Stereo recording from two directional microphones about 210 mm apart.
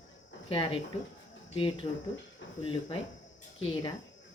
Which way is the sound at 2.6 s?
25° left (ahead or behind).